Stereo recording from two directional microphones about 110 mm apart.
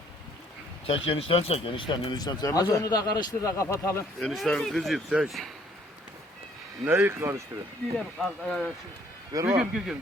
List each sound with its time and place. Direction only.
0.9 s speech: 60° left (ahead or behind); by 4.0 s 25° left (ahead or behind)
4.2 s speech: centre (ahead or behind)
6.8 s speech: 20° right (ahead or behind)
7.9 s speech: 5° left (ahead or behind)
9.3 s speech: 30° right (ahead or behind)
9.6 s speech: 5° right (ahead or behind)